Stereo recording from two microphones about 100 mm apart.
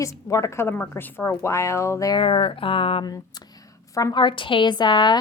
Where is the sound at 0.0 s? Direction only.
30° left (ahead or behind).